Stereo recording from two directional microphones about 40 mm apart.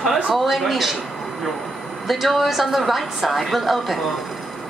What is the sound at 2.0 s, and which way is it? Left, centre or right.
A woman's voice, centre.